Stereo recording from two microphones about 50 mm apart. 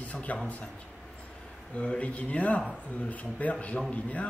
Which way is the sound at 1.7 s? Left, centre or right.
Left.